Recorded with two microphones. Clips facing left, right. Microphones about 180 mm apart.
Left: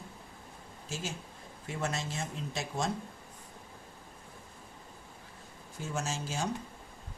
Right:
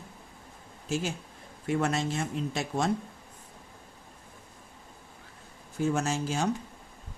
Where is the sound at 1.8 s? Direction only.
60° right (ahead or behind).